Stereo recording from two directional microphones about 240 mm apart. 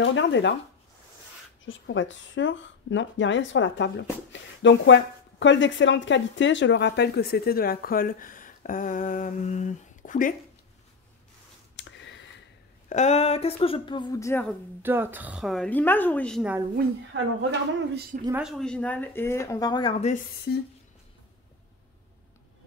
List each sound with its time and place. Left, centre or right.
0.0 s speech: left
1.6 s speech: left
11.7 s a sound: left
12.9 s speech: left; by 14.5 s centre
14.8 s a woman's voice: centre
16.7 s a woman's voice: right
18.4 s speech: centre; by 20.2 s left
20.5 s speech: left